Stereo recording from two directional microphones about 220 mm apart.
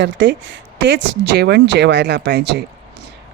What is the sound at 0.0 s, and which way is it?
Speech, 55° right (ahead or behind).